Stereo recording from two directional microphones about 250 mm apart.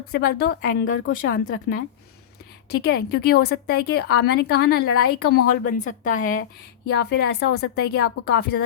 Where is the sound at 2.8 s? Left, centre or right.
Left.